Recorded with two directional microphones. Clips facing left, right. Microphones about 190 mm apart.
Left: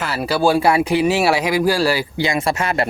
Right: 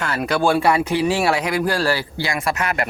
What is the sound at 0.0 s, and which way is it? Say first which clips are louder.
Speech: left 2 dB; 5° left (ahead or behind).